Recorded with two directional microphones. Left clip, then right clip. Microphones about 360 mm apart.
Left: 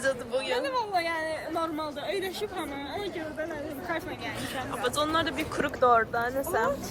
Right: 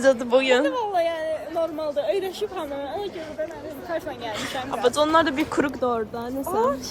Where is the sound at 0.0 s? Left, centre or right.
Centre.